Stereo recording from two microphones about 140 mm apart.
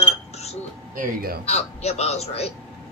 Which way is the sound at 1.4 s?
50° left (ahead or behind).